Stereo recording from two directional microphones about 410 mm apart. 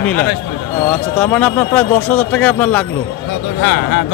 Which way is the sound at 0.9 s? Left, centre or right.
Centre.